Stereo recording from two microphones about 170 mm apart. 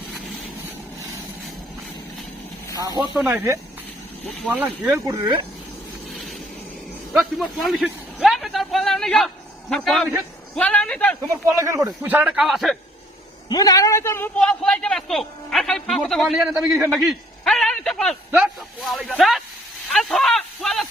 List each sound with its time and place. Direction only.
2.7 s speech: 20° right (ahead or behind)
3.1 s speech: 10° right (ahead or behind)
5.0 s speech: 30° right (ahead or behind)
7.2 s vehicle: centre (ahead or behind)
10.5 s a man's voice: 10° left (ahead or behind)
11.2 s speech: 20° right (ahead or behind)
12.0 s speech: 10° right (ahead or behind)
13.5 s speech: 20° left (ahead or behind)
14.3 s speech: 5° left (ahead or behind)
16.6 s speech: 15° right (ahead or behind)
16.9 s a sound: centre (ahead or behind)
18.3 s speech: 5° right (ahead or behind)
19.9 s a sound: centre (ahead or behind)